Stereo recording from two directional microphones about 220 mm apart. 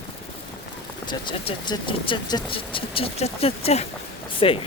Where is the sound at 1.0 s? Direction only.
20° left (ahead or behind).